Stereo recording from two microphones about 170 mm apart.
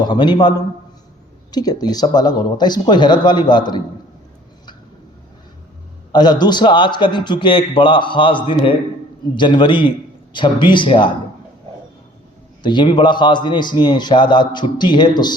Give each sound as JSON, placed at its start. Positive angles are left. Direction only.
{"t": 0.0, "sound": "a man's voice", "side_deg": 25}
{"t": 6.1, "sound": "a man's voice", "side_deg": 25}
{"t": 12.6, "sound": "a man's voice", "side_deg": 25}